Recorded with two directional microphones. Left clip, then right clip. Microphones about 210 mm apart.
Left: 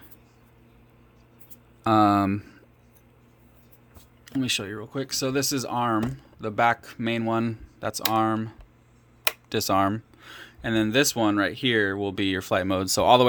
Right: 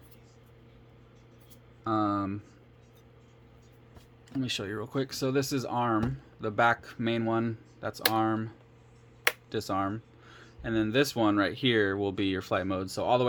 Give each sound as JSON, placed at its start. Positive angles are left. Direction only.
{"t": 1.8, "sound": "speech", "side_deg": 30}
{"t": 4.3, "sound": "speech", "side_deg": 25}
{"t": 4.6, "sound": "speech", "side_deg": 0}
{"t": 5.0, "sound": "speech", "side_deg": 15}